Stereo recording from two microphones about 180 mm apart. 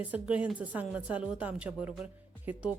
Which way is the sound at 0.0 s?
5° right (ahead or behind).